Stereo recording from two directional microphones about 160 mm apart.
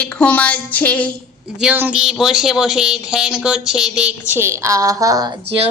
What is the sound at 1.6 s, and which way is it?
Speech, 10° right (ahead or behind).